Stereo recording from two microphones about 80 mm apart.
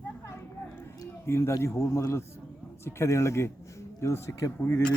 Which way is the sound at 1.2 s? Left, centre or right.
Left.